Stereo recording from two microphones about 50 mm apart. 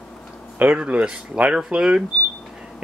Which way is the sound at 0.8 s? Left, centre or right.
Right.